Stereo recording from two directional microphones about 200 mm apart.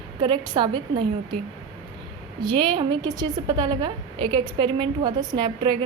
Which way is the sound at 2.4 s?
20° right (ahead or behind).